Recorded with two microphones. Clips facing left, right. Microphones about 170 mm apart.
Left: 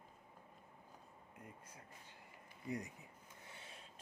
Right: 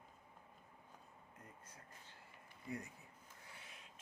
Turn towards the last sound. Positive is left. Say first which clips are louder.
# left 3 dB
turn(degrees=30)  # may be behind; listen again after turning